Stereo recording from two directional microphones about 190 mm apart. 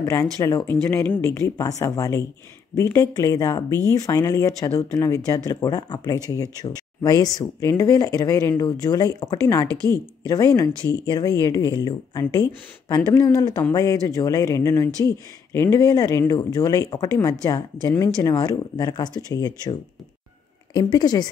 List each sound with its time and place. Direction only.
0.0 s speech: 20° left (ahead or behind)